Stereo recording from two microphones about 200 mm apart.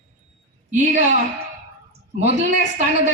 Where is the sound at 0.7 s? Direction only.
35° right (ahead or behind).